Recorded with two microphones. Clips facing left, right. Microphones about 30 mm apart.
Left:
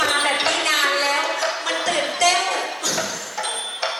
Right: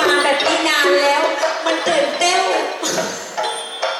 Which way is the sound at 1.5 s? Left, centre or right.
Centre.